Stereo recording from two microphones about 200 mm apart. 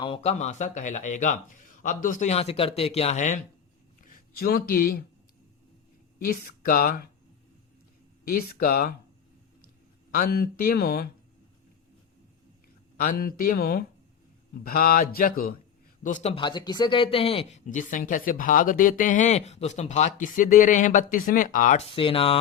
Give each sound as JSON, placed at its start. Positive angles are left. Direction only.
{"t": 0.0, "sound": "speech", "side_deg": 30}
{"t": 6.2, "sound": "speech", "side_deg": 50}
{"t": 8.2, "sound": "speech", "side_deg": 45}
{"t": 10.1, "sound": "speech", "side_deg": 50}
{"t": 13.0, "sound": "speech", "side_deg": 45}
{"t": 21.8, "sound": "speech", "side_deg": 25}